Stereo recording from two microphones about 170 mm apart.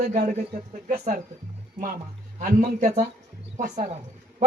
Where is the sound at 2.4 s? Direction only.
50° right (ahead or behind).